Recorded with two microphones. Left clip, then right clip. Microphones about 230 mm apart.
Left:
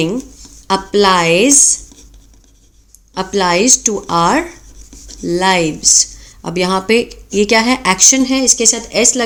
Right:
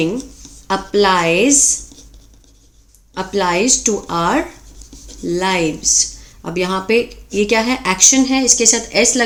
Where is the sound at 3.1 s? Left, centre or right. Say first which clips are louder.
Left 3 dB; left.